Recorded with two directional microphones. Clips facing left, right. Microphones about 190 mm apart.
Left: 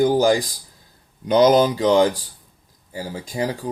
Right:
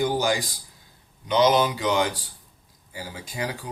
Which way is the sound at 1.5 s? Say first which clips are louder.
Left 7 dB; 35° left (ahead or behind).